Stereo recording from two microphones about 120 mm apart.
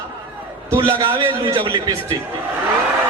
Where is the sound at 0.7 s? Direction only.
45° right (ahead or behind).